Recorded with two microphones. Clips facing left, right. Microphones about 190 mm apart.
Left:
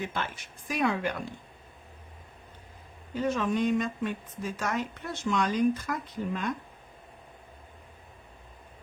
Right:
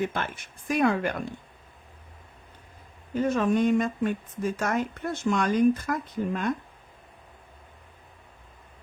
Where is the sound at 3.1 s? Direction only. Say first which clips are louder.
Right 4 dB; 50° right (ahead or behind).